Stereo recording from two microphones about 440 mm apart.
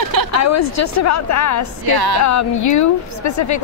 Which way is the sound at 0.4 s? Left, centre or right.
Left.